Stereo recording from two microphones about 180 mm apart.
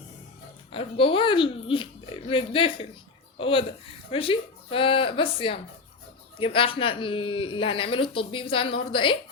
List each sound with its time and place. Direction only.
0.7 s speech: 30° left (ahead or behind)